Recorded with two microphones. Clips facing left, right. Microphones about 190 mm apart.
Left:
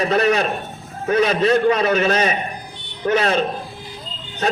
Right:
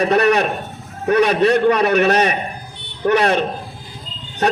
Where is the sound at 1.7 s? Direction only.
65° right (ahead or behind).